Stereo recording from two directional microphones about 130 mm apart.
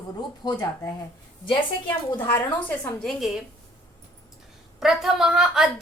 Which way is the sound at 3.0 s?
Centre (ahead or behind).